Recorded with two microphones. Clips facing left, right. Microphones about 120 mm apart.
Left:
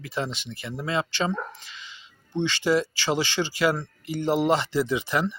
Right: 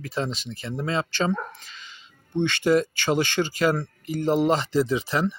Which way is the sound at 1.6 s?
40° right (ahead or behind).